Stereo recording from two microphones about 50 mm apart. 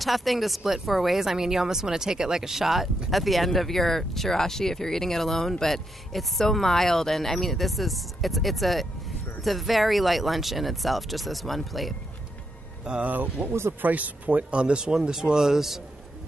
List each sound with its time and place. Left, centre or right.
0.0 s speech: centre
13.0 s a man's voice: right
13.5 s speech: right
13.7 s a man's voice: right
14.6 s a man's voice: centre